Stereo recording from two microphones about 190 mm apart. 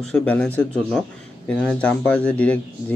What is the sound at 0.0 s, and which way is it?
Speech, 5° left (ahead or behind).